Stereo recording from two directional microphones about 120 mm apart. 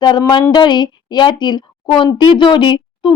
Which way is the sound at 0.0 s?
35° left (ahead or behind).